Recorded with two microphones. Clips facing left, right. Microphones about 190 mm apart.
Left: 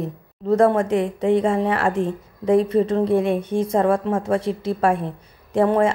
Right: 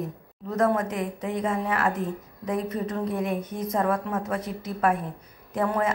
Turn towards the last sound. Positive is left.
turn(degrees=25)  # may be behind; listen again after turning